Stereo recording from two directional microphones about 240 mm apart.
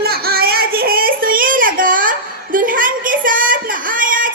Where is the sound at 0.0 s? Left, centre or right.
Right.